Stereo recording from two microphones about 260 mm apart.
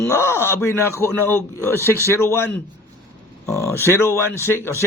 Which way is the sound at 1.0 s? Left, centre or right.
Centre.